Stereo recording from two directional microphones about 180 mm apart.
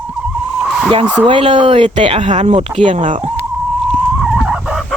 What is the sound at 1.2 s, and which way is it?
Speech, 30° right (ahead or behind).